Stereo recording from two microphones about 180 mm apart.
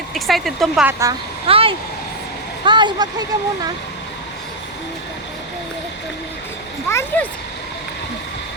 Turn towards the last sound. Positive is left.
turn(degrees=10)  # may be behind; listen again after turning